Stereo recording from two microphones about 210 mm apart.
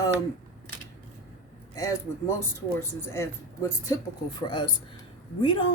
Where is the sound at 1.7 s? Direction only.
15° left (ahead or behind).